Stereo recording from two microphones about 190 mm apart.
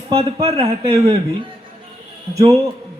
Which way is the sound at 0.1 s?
30° right (ahead or behind).